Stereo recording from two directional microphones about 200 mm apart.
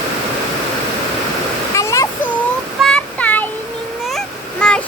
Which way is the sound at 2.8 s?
5° left (ahead or behind).